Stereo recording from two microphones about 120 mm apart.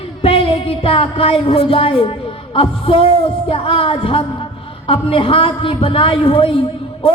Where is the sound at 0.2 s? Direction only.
50° left (ahead or behind).